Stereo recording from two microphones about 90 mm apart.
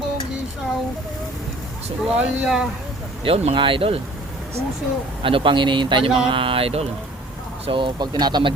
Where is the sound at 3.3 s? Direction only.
70° right (ahead or behind); by 4.0 s 90° right.